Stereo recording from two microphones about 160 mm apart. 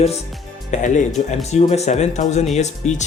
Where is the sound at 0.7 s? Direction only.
50° left (ahead or behind).